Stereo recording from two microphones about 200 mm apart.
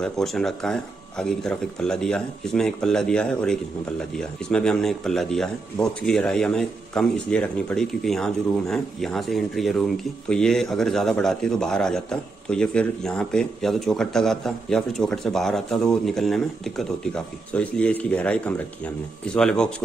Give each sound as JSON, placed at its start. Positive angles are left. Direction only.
{"t": 0.0, "sound": "speech", "side_deg": 0}